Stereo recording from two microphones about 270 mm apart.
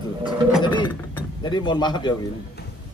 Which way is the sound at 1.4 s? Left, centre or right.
Centre.